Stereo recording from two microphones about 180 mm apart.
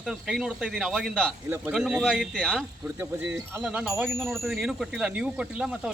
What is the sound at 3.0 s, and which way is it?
Speech, 10° right (ahead or behind).